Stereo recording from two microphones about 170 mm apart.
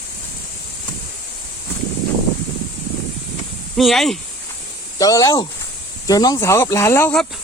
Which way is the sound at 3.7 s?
Centre (ahead or behind).